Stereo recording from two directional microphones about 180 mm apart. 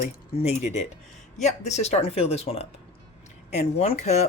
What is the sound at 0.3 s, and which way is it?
Speech, 40° left (ahead or behind).